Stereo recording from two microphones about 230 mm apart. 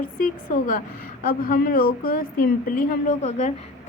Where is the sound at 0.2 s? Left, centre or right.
Left.